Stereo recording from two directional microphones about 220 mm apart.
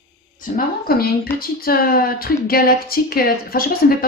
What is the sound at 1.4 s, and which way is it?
Speech, 40° left (ahead or behind).